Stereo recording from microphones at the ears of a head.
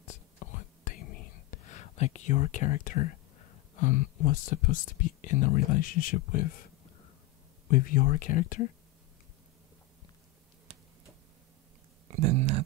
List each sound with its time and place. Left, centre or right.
0.0 s whispering: left
7.6 s speech: left
12.1 s a sound: right